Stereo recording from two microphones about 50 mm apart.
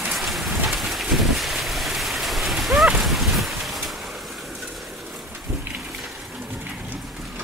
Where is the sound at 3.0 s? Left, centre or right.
Centre.